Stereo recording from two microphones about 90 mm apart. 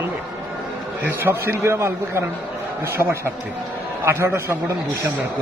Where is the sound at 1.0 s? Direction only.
25° right (ahead or behind).